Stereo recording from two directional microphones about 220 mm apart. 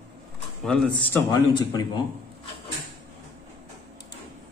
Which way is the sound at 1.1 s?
15° left (ahead or behind).